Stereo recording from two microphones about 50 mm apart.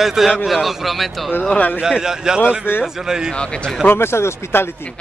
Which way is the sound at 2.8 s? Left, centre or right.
Centre.